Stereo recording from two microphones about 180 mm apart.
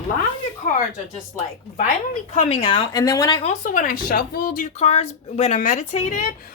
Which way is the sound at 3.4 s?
45° left (ahead or behind).